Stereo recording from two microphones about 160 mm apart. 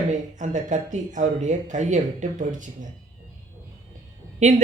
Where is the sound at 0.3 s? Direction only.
50° right (ahead or behind).